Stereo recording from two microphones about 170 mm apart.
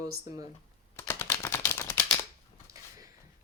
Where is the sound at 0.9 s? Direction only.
15° left (ahead or behind).